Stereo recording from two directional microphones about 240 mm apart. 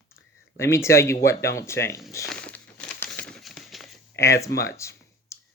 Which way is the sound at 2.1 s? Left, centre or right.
Centre.